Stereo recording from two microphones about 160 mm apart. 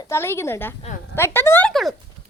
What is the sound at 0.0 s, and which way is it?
A woman's voice, 15° left (ahead or behind).